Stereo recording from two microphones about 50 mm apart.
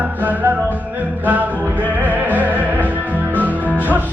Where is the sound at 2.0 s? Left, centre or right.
Right.